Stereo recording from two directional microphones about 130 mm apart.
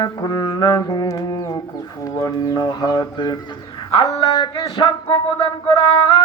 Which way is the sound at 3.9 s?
30° left (ahead or behind).